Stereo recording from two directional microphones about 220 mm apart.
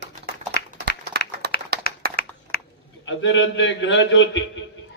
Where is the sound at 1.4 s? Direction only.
50° right (ahead or behind).